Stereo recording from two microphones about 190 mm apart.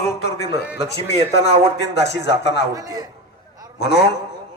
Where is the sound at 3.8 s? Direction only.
60° left (ahead or behind).